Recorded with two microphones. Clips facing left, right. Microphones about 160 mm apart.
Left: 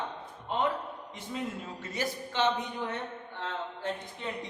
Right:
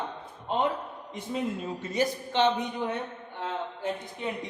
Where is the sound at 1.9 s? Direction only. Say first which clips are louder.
Right 6 dB; 20° right (ahead or behind).